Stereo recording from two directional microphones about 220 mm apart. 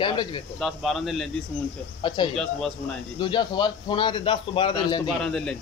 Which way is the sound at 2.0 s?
20° left (ahead or behind).